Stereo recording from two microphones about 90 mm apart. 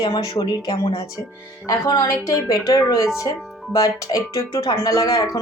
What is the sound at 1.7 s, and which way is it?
Speech, 40° left (ahead or behind).